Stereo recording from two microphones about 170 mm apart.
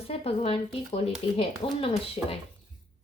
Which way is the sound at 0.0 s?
35° left (ahead or behind).